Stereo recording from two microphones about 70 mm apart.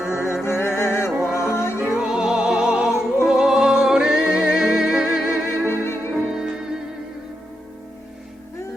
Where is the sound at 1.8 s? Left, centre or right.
Centre.